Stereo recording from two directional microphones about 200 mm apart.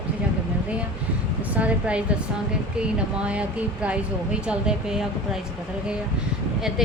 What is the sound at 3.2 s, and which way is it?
Speech, 5° right (ahead or behind).